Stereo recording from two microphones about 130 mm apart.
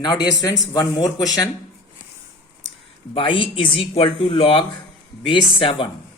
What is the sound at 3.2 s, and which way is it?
A woman's voice, 45° left (ahead or behind).